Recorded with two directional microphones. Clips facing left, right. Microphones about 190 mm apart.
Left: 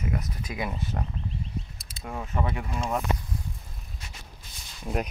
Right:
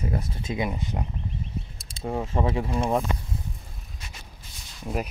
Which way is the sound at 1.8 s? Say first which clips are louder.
Right 10 dB; 30° right (ahead or behind).